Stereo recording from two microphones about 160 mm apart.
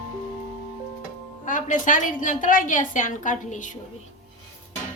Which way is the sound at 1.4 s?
55° left (ahead or behind).